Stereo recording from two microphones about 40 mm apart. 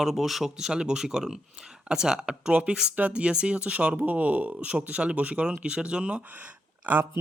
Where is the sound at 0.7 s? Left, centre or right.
Right.